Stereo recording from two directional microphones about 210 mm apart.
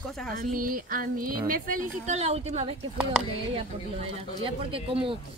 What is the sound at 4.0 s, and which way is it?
Speech, 25° right (ahead or behind).